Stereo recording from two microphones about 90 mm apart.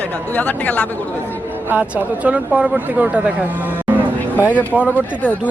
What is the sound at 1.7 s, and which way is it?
Speech, 15° right (ahead or behind).